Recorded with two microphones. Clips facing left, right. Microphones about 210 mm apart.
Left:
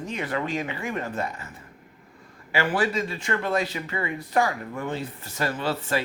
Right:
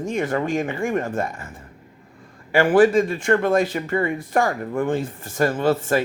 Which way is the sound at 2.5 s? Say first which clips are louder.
Right 10 dB; 50° right (ahead or behind).